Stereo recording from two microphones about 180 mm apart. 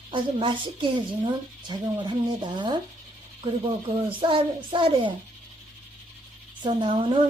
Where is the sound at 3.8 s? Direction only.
30° right (ahead or behind).